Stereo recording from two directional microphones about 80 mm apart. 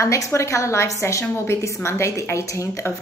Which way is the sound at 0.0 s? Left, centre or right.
Left.